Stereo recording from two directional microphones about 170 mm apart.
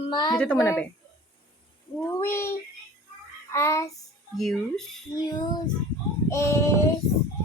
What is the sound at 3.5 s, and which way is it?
Child singing, 15° left (ahead or behind).